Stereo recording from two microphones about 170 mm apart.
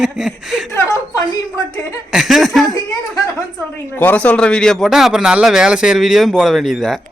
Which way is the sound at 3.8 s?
10° left (ahead or behind).